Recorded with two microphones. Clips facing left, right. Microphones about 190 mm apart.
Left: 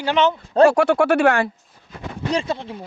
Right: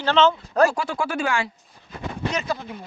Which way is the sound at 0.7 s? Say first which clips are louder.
Left 11 dB; 70° left (ahead or behind).